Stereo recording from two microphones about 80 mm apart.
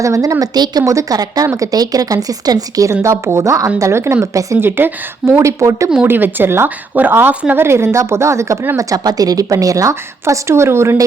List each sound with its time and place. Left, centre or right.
0.0 s a woman's voice: right
2.9 s a woman's voice: right
6.1 s a woman's voice: right